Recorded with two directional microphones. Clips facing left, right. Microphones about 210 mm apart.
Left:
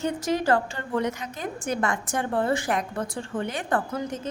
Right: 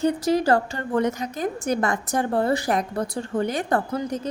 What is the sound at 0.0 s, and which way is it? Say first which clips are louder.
A woman's voice: right 5 dB; 35° right (ahead or behind).